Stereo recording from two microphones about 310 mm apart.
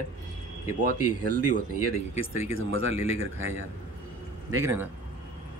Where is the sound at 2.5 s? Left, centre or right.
Right.